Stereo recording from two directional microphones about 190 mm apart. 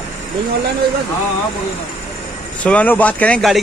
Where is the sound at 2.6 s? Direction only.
10° left (ahead or behind).